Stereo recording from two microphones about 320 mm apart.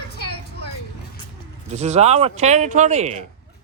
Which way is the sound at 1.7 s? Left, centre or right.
Right.